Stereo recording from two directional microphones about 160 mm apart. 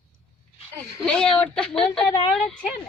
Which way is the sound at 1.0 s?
5° left (ahead or behind).